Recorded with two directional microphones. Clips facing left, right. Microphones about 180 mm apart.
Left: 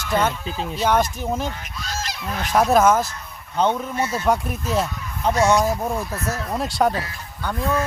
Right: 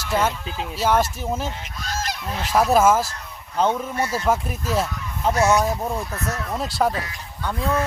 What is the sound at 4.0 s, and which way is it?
Speech, 20° left (ahead or behind).